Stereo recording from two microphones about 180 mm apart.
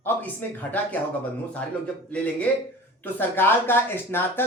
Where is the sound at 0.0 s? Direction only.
10° left (ahead or behind).